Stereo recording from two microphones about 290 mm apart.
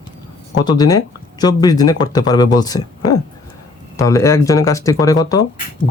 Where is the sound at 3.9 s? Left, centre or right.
Centre.